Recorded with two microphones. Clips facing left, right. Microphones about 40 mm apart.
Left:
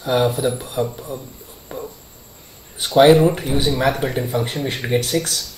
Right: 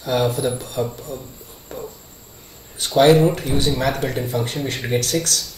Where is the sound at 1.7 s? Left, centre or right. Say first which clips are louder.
Left 1 dB; centre.